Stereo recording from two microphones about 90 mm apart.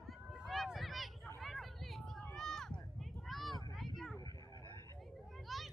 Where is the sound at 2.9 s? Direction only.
Centre (ahead or behind).